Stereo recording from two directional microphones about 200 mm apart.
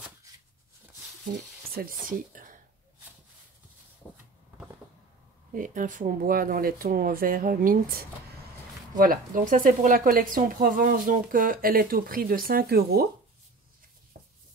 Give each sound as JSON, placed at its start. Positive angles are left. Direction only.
{"t": 1.7, "sound": "speech", "side_deg": -45}
{"t": 5.5, "sound": "speech", "side_deg": -40}
{"t": 14.2, "sound": "chopping", "side_deg": -45}